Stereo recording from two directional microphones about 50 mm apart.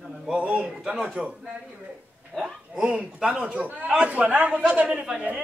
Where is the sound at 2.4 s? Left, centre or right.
Centre.